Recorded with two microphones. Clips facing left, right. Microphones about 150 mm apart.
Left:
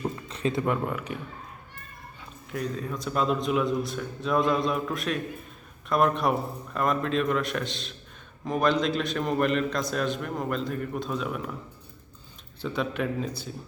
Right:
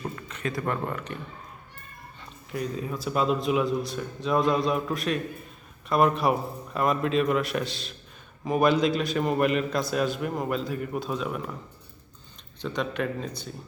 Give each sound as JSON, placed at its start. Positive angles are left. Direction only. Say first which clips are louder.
{"t": 0.3, "sound": "a sound", "louder": "left 4 dB", "side_deg": 30}
{"t": 0.6, "sound": "speech", "louder": "left 2 dB", "side_deg": 5}
{"t": 2.5, "sound": "a man's voice", "louder": "right 1 dB", "side_deg": 0}
{"t": 12.6, "sound": "a man's voice", "louder": "even", "side_deg": 5}